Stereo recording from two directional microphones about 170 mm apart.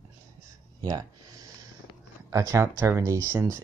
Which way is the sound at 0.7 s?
20° right (ahead or behind).